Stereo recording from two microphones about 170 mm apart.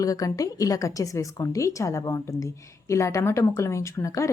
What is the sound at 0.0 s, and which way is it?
A woman's voice, 20° left (ahead or behind).